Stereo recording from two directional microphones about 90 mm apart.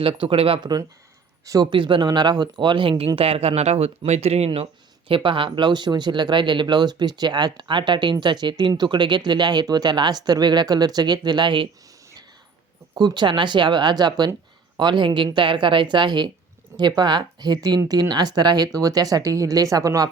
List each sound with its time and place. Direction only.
0.0 s speech: 85° right
0.6 s speech: 50° right (ahead or behind)
1.7 s speech: 60° right (ahead or behind)
3.2 s speech: 90° right
4.0 s speech: 70° right (ahead or behind)
4.4 s speech: 90° right; by 11.7 s 60° right (ahead or behind)
13.0 s speech: 55° right (ahead or behind)